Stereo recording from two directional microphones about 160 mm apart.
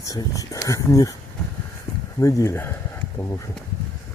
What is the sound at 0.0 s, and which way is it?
Speech, 20° left (ahead or behind).